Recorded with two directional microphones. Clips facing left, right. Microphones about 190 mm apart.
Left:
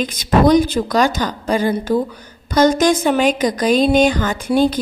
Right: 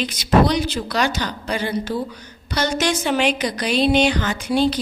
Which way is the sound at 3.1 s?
45° left (ahead or behind).